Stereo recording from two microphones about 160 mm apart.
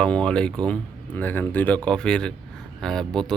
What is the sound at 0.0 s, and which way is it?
Speech, 5° left (ahead or behind).